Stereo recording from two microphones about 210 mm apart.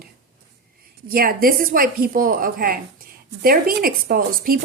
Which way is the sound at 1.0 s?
45° right (ahead or behind).